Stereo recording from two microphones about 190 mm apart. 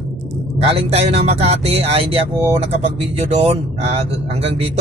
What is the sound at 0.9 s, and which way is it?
Speech, 35° right (ahead or behind).